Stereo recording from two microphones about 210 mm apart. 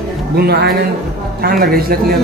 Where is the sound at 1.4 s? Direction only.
45° right (ahead or behind).